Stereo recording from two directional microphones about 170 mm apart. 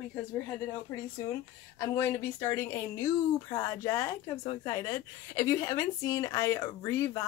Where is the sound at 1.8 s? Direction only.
15° left (ahead or behind).